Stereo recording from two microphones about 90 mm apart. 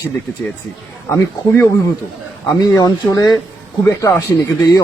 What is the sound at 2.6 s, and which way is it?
Speech, 50° left (ahead or behind).